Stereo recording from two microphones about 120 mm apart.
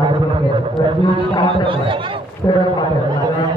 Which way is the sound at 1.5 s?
45° right (ahead or behind).